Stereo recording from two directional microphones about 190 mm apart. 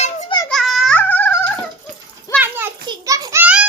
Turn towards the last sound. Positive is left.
turn(degrees=-10)  # may be behind; listen again after turning